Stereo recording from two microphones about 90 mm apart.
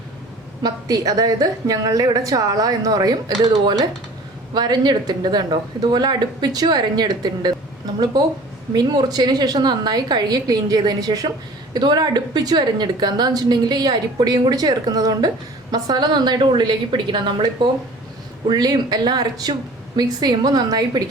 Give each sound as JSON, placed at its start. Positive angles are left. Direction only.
{"t": 0.6, "sound": "speech", "side_deg": -45}
{"t": 4.5, "sound": "speech", "side_deg": -50}
{"t": 8.7, "sound": "speech", "side_deg": -50}
{"t": 14.5, "sound": "a woman's voice", "side_deg": -45}
{"t": 18.4, "sound": "speech", "side_deg": -50}